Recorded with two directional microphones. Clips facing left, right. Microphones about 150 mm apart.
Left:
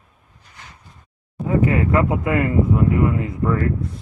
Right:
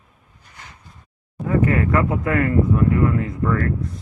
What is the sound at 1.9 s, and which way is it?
Speech, 15° left (ahead or behind).